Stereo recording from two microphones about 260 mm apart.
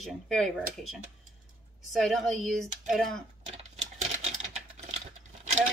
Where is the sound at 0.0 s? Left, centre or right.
Centre.